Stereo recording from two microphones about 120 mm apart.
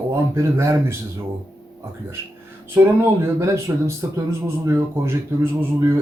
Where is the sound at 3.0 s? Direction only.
20° right (ahead or behind).